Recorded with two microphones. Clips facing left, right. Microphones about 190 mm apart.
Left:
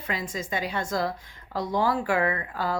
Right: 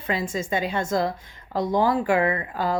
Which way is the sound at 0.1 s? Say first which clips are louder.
Right 5 dB; 25° right (ahead or behind).